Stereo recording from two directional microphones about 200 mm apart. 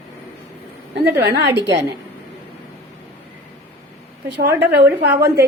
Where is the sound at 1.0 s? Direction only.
55° right (ahead or behind).